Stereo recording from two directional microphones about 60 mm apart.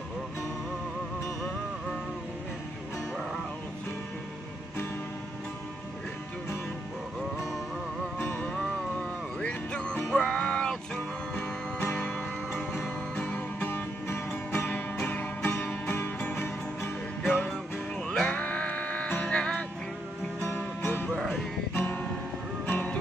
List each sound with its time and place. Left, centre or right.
8.2 s music: left
9.4 s music: centre
11.3 s music: left
13.1 s music: centre
13.6 s music: left
18.0 s music: centre
18.3 s music: left
20.3 s music: left